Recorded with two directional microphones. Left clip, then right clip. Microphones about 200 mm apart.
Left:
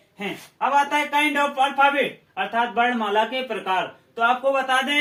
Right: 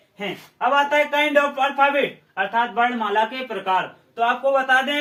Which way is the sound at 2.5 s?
20° left (ahead or behind).